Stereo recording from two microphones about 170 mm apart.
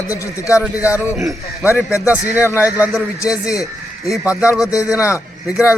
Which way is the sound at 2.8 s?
10° right (ahead or behind).